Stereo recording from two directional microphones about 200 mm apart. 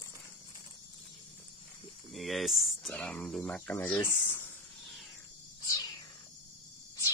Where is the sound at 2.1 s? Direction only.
Centre (ahead or behind).